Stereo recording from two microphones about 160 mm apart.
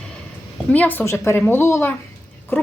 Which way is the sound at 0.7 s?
10° left (ahead or behind).